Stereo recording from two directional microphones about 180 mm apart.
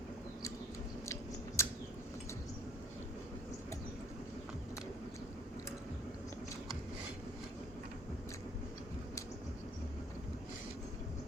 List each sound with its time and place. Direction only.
1.0 s chewing: 15° left (ahead or behind)